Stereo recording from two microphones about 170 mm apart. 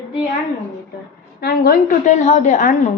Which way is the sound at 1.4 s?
65° left (ahead or behind).